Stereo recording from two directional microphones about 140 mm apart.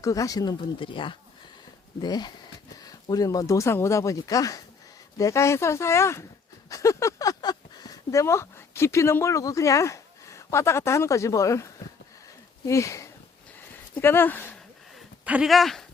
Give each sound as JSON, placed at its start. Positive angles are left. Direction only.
{"t": 0.0, "sound": "speech", "side_deg": 25}
{"t": 0.6, "sound": "speech", "side_deg": 35}
{"t": 15.2, "sound": "speech", "side_deg": -10}